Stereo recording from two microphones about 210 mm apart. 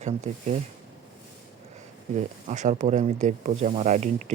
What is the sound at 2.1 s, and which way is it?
Speech, 35° right (ahead or behind).